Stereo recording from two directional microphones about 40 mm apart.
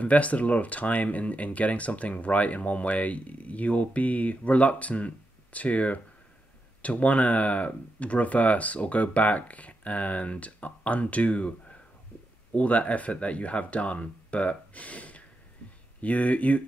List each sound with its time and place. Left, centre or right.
0.0 s speech: left